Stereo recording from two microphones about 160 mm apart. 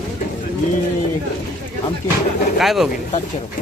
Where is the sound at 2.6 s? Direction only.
Centre (ahead or behind).